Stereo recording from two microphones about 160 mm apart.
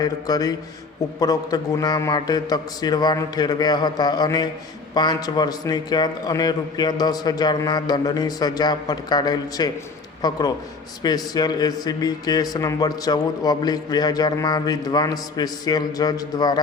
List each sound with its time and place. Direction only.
0.0 s a man's voice: 25° left (ahead or behind)